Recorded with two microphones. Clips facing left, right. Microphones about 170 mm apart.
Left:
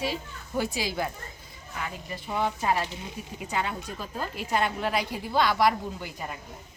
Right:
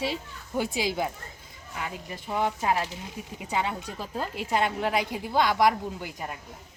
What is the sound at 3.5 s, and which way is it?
A woman's voice, 20° right (ahead or behind).